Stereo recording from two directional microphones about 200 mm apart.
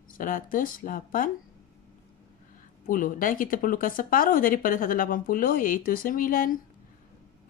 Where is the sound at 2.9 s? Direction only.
45° left (ahead or behind).